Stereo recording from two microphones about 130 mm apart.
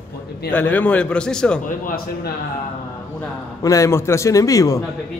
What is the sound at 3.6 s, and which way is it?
A man's voice, 25° left (ahead or behind).